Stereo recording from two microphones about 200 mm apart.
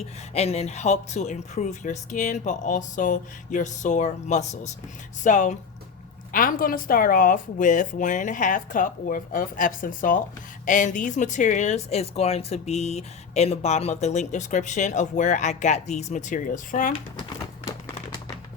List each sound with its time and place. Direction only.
0.0 s speech: 30° left (ahead or behind)